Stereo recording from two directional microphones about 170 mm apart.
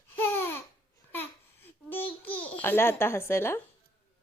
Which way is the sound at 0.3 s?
15° left (ahead or behind).